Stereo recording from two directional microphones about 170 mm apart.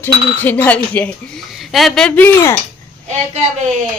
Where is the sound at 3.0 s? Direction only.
40° right (ahead or behind).